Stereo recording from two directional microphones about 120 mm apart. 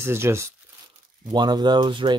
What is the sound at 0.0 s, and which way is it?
Speech, 20° right (ahead or behind).